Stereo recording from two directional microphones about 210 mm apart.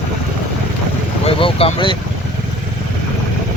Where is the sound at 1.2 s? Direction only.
25° left (ahead or behind).